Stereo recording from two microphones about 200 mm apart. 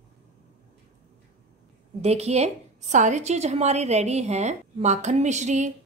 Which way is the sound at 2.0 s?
30° right (ahead or behind).